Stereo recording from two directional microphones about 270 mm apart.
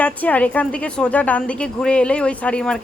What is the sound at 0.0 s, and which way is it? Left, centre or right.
A woman's voice, centre.